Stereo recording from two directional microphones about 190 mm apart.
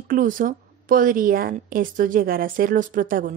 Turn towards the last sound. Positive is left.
turn(degrees=-45)  # may be behind; listen again after turning